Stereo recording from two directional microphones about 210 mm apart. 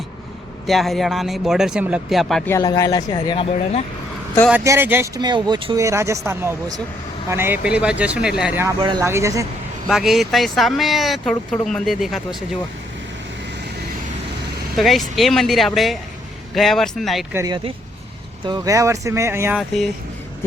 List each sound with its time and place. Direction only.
0.7 s speech: centre (ahead or behind)
2.5 s speech: 15° left (ahead or behind)
4.6 s speech: 10° right (ahead or behind)
8.6 s speech: 20° right (ahead or behind)
9.8 s speech: centre (ahead or behind)
14.8 s speech: centre (ahead or behind)
17.3 s speech: 20° right (ahead or behind)